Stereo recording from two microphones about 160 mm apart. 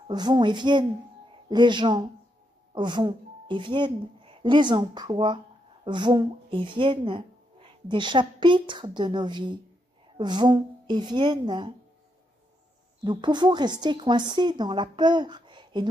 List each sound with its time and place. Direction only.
0.1 s a woman's voice: 25° right (ahead or behind)
13.0 s speech: 30° right (ahead or behind)